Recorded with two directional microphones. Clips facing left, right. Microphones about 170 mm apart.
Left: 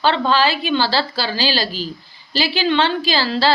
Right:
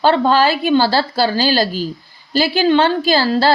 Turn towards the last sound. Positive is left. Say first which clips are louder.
# right 4 dB
turn(degrees=-50)  # may be behind; listen again after turning